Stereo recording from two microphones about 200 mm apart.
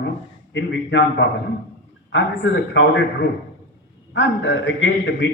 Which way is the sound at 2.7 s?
65° left (ahead or behind).